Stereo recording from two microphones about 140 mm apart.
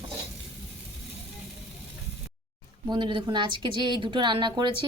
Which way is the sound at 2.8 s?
35° right (ahead or behind).